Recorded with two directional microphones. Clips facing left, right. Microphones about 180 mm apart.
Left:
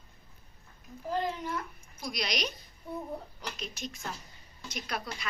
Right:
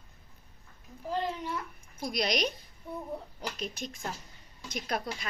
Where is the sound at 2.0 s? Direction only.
50° right (ahead or behind).